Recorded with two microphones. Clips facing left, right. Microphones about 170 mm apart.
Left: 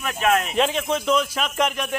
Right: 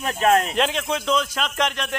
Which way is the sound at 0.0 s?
35° right (ahead or behind).